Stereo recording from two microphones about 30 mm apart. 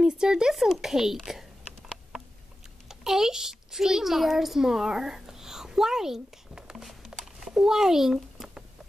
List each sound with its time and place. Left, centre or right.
0.0 s speech: right
2.9 s a child's voice: centre
4.6 s a sound: centre